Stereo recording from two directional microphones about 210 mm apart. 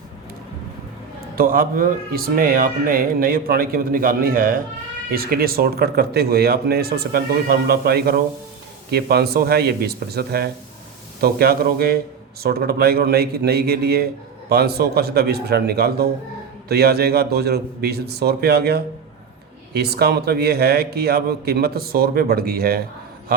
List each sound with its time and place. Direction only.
1.4 s speech: 45° right (ahead or behind)